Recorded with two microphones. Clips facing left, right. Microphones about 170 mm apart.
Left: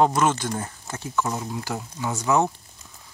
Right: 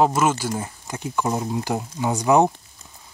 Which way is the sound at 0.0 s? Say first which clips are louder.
Right 1 dB; 5° right (ahead or behind).